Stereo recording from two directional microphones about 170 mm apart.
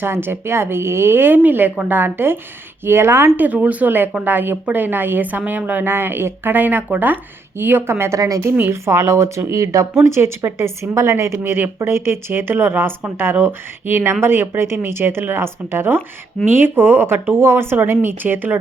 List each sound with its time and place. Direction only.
0.0 s a woman's voice: 15° right (ahead or behind)